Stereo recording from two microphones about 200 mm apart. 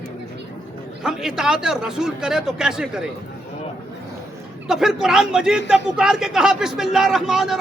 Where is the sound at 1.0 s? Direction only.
5° right (ahead or behind).